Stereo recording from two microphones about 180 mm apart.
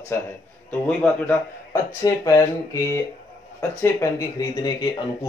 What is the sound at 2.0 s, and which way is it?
Speech, 20° left (ahead or behind).